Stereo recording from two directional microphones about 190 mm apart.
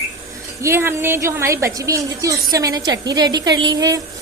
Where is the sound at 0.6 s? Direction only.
15° right (ahead or behind).